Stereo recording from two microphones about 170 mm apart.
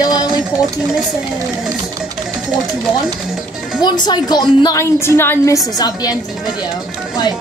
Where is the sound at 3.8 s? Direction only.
25° left (ahead or behind).